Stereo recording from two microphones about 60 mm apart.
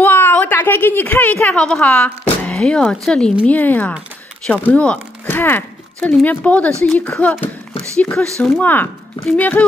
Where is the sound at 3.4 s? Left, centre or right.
Left.